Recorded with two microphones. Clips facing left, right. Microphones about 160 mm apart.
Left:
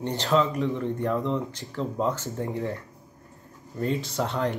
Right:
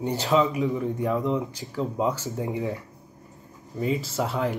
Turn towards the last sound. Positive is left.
turn(degrees=-5)  # may be behind; listen again after turning